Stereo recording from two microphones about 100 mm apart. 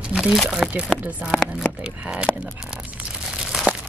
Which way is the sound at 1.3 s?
10° left (ahead or behind).